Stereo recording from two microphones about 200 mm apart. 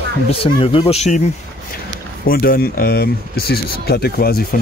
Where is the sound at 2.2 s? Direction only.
50° left (ahead or behind).